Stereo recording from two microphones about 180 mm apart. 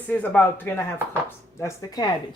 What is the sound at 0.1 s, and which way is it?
Speech, 10° left (ahead or behind).